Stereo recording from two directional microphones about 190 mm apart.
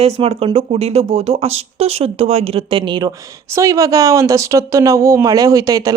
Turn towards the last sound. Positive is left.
turn(degrees=-20)  # may be behind; listen again after turning